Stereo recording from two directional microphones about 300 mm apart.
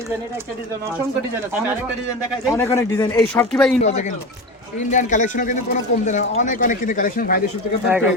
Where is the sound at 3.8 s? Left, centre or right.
Left.